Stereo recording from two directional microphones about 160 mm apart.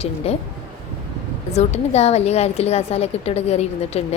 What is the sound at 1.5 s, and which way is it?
A woman's voice, 40° left (ahead or behind).